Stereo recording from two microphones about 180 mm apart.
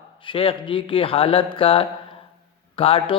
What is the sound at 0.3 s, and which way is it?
A man's voice, 30° left (ahead or behind).